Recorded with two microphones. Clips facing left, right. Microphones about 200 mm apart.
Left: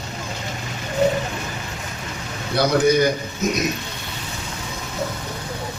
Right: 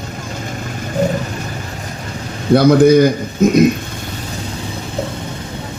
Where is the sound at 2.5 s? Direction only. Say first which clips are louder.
Right 9 dB; 55° right (ahead or behind).